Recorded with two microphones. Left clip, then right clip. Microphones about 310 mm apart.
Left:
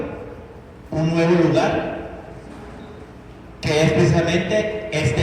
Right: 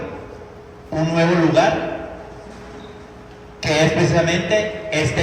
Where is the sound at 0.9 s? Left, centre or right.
Right.